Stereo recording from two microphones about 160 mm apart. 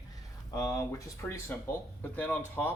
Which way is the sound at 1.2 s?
15° left (ahead or behind).